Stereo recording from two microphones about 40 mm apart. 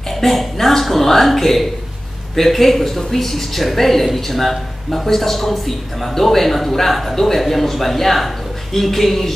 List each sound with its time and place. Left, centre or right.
0.1 s speech: centre